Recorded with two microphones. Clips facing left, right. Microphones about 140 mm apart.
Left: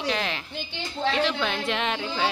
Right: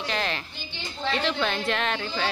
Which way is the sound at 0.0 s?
5° left (ahead or behind).